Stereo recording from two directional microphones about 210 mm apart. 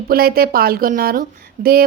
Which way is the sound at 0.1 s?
45° right (ahead or behind).